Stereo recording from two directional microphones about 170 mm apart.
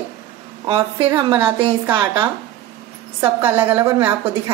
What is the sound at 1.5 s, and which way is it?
Speech, 10° right (ahead or behind).